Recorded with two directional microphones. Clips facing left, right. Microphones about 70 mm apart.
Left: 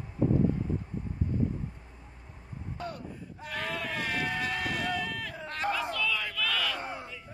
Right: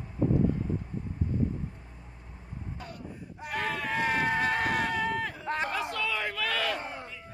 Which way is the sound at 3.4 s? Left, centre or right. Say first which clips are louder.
Right 3 dB; right.